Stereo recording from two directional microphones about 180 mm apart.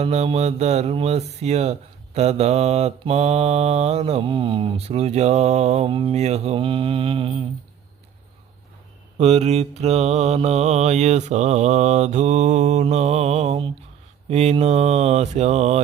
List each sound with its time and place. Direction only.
0.0 s mantra: 35° right (ahead or behind)
9.1 s mantra: 35° right (ahead or behind)